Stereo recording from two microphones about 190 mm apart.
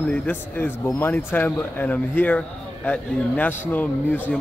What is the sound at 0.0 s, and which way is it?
Speech, 5° left (ahead or behind).